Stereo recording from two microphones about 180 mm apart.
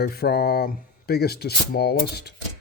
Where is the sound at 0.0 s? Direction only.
60° left (ahead or behind).